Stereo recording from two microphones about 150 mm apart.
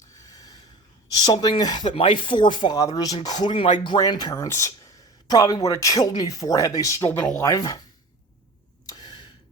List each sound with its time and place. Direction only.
0.2 s snort: 25° left (ahead or behind)
1.2 s speech: 30° left (ahead or behind)
3.4 s speech: 35° left (ahead or behind)
8.9 s a sound: 25° left (ahead or behind)